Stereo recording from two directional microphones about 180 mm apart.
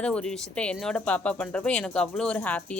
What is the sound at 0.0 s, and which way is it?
Speech, 5° left (ahead or behind).